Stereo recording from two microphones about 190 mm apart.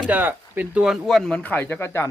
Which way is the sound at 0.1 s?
10° right (ahead or behind).